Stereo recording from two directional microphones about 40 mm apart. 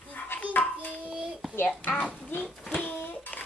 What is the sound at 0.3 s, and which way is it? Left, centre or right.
Hands, left.